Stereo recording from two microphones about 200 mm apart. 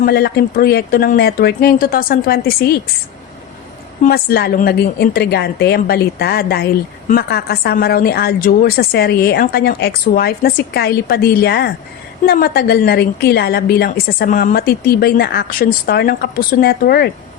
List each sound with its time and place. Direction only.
0.0 s a woman's voice: 50° left (ahead or behind)
4.0 s a woman's voice: 50° left (ahead or behind)